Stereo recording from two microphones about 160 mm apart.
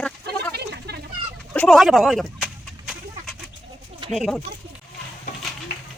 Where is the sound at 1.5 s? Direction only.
5° left (ahead or behind).